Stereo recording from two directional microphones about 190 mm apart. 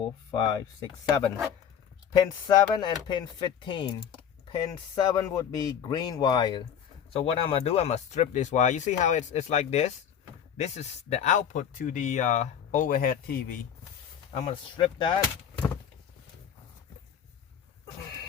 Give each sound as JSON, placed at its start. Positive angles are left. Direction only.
{"t": 0.3, "sound": "speech", "side_deg": 20}
{"t": 2.1, "sound": "speech", "side_deg": 20}
{"t": 14.3, "sound": "speech", "side_deg": 30}